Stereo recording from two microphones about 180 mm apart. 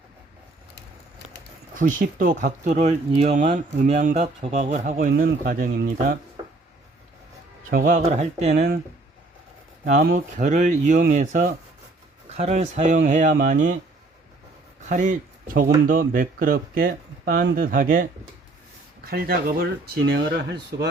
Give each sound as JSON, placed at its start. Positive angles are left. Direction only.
{"t": 1.7, "sound": "speech", "side_deg": -45}
{"t": 7.7, "sound": "speech", "side_deg": -50}
{"t": 8.0, "sound": "speech", "side_deg": -40}
{"t": 8.5, "sound": "speech", "side_deg": -55}
{"t": 9.8, "sound": "speech", "side_deg": -55}
{"t": 14.8, "sound": "speech", "side_deg": -45}